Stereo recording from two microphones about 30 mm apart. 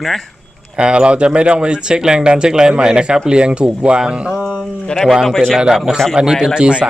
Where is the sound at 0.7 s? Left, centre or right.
Right.